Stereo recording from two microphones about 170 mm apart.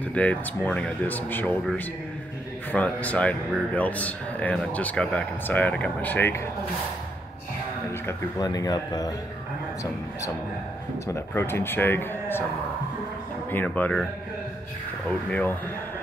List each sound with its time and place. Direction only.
0.1 s speech: 10° left (ahead or behind)
2.7 s speech: 10° left (ahead or behind)
8.4 s speech: 20° left (ahead or behind)
11.1 s speech: 15° left (ahead or behind)
13.5 s speech: 10° left (ahead or behind)
15.0 s speech: 10° left (ahead or behind)